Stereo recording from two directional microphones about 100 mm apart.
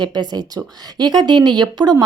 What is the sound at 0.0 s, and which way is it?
Speech, 45° right (ahead or behind).